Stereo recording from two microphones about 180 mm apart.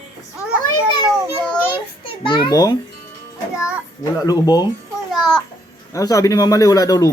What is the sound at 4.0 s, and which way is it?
Speech, 20° left (ahead or behind).